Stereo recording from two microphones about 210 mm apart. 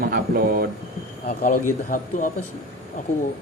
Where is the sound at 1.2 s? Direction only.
40° left (ahead or behind).